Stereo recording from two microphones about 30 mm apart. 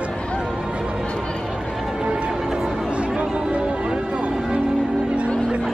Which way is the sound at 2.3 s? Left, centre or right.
Centre.